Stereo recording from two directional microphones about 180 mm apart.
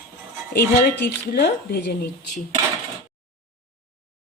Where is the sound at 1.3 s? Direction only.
60° left (ahead or behind).